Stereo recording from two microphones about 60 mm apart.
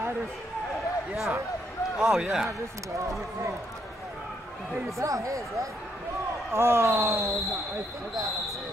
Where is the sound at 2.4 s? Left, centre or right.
Right.